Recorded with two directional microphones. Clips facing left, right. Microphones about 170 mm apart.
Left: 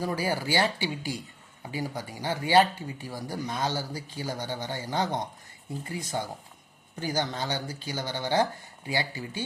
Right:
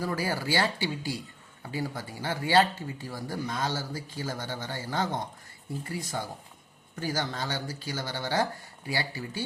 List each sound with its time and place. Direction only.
0.0 s speech: 20° left (ahead or behind)